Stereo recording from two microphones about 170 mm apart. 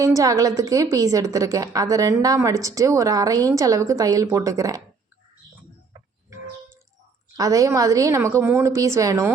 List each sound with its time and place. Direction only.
0.0 s a woman's voice: 20° right (ahead or behind)
7.3 s a woman's voice: 20° right (ahead or behind)